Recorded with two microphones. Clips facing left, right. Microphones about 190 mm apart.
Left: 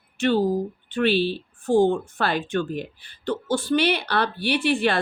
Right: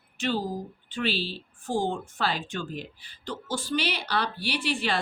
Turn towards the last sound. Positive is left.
turn(degrees=60)  # may be behind; listen again after turning